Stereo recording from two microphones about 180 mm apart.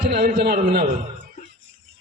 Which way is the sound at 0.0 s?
60° right (ahead or behind).